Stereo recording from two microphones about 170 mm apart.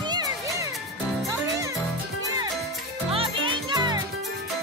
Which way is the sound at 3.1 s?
30° right (ahead or behind).